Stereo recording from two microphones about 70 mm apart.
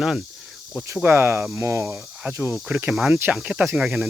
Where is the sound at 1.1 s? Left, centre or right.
Right.